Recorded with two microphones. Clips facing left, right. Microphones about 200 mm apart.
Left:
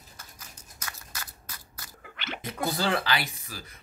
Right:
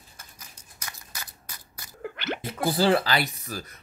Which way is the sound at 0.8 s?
15° right (ahead or behind).